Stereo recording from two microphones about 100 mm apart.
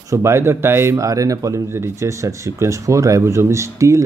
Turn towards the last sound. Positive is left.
turn(degrees=-30)  # may be behind; listen again after turning